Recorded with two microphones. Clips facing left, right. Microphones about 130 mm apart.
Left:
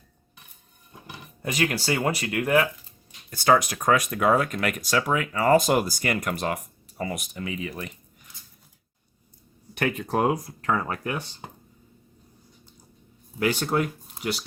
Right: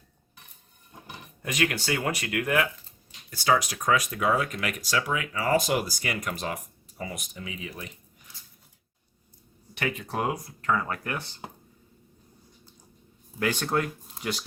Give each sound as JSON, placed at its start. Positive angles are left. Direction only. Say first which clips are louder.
{"t": 1.4, "sound": "speech", "louder": "left 2 dB", "side_deg": 30}
{"t": 3.2, "sound": "speech", "louder": "left 4 dB", "side_deg": 50}
{"t": 9.7, "sound": "speech", "louder": "left 5 dB", "side_deg": 50}
{"t": 10.8, "sound": "speech", "louder": "left 3 dB", "side_deg": 20}
{"t": 13.4, "sound": "speech", "louder": "left 3 dB", "side_deg": 10}